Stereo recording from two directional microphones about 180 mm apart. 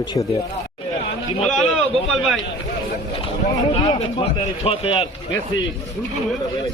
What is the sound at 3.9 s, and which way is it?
Speech, 35° left (ahead or behind).